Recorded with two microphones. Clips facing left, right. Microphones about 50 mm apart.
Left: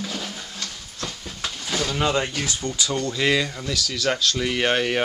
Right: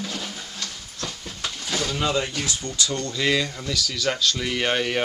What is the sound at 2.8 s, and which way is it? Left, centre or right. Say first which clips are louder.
Speech: left 2 dB; centre.